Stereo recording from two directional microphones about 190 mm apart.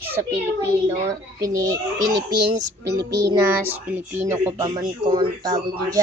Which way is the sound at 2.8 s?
15° right (ahead or behind).